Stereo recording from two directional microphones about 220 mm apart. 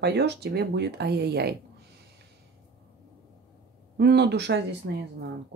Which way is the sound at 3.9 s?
50° right (ahead or behind).